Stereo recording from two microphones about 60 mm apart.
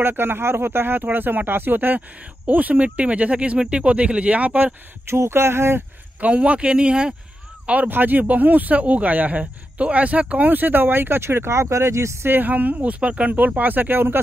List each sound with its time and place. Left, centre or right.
0.0 s speech: right
5.1 s speech: right
6.2 s speech: right
7.9 s speech: right
12.3 s speech: right